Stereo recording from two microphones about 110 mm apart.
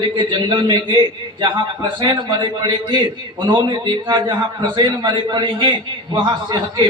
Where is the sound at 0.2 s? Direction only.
45° right (ahead or behind).